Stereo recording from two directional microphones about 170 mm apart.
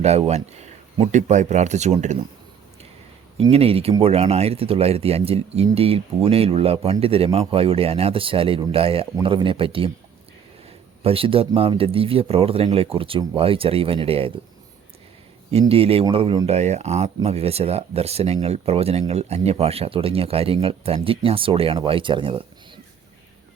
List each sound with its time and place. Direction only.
0.0 s speech: 40° right (ahead or behind)
3.3 s speech: 35° right (ahead or behind)
11.0 s speech: 35° right (ahead or behind)
15.7 s speech: 35° right (ahead or behind)
16.5 s speech: 40° right (ahead or behind)